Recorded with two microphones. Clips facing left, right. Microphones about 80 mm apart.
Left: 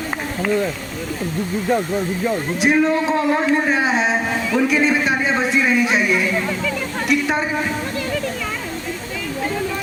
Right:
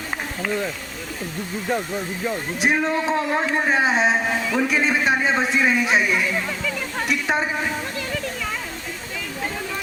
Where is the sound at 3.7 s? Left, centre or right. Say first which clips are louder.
Left 1 dB; right.